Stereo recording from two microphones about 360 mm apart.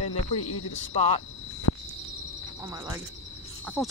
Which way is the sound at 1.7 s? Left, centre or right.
Left.